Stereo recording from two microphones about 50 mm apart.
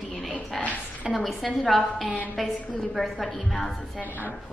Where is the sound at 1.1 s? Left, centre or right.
Centre.